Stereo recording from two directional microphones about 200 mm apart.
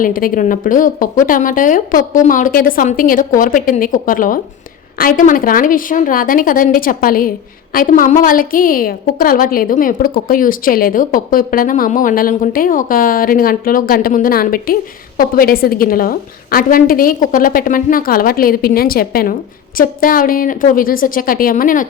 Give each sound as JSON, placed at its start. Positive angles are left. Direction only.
{"t": 0.0, "sound": "a woman's voice", "side_deg": 45}